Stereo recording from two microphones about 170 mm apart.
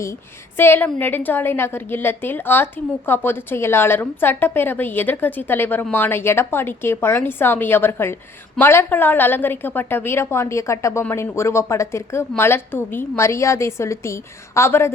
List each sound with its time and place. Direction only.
0.0 s a woman's voice: 15° left (ahead or behind)